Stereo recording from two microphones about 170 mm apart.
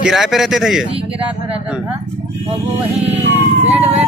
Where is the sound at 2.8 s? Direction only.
10° right (ahead or behind).